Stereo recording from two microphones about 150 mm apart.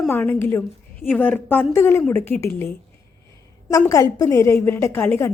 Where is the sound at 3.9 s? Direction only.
20° left (ahead or behind).